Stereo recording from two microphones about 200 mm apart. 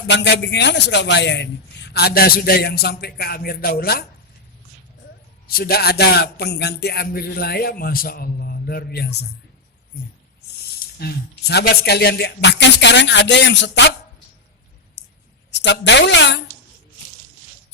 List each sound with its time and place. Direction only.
0.1 s a man's voice: 60° left (ahead or behind)
5.5 s a man's voice: 50° left (ahead or behind)
10.9 s speech: 50° left (ahead or behind)
15.5 s speech: 60° left (ahead or behind)